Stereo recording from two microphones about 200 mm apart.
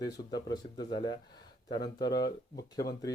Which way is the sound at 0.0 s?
20° left (ahead or behind).